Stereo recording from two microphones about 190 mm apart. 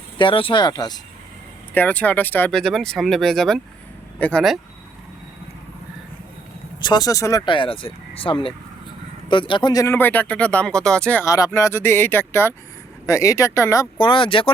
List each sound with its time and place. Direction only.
0.2 s speech: 25° left (ahead or behind)
1.7 s speech: 10° left (ahead or behind)
6.8 s speech: 20° left (ahead or behind)